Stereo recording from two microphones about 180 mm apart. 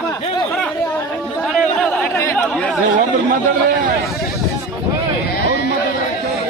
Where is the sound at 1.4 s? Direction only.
Centre (ahead or behind).